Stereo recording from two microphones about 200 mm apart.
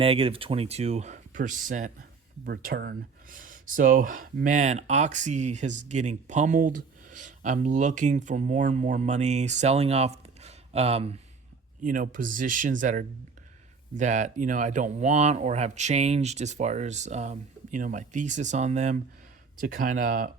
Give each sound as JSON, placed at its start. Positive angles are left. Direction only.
{"t": 0.0, "sound": "speech", "side_deg": -30}
{"t": 11.8, "sound": "speech", "side_deg": -40}